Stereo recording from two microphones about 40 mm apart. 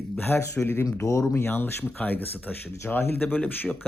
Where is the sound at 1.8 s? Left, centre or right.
Left.